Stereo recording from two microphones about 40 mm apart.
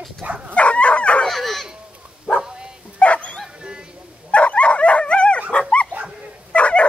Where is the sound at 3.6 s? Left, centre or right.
Right.